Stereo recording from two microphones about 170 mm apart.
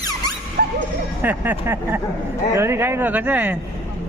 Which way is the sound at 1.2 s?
10° right (ahead or behind).